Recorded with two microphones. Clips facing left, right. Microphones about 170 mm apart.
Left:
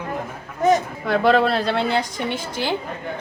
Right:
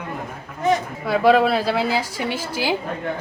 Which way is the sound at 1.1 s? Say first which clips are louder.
Right 1 dB; 5° right (ahead or behind).